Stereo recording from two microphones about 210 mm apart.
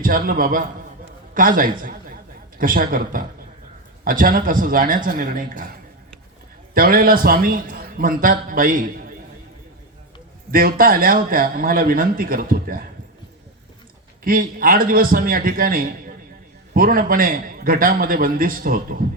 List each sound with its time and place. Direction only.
0.0 s a man's voice: 40° right (ahead or behind)
6.7 s a man's voice: 45° right (ahead or behind)
10.5 s a man's voice: 45° right (ahead or behind)
14.3 s a man's voice: 45° right (ahead or behind)